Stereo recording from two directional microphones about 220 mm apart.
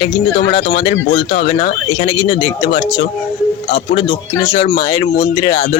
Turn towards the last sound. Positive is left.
turn(degrees=25)  # may be behind; listen again after turning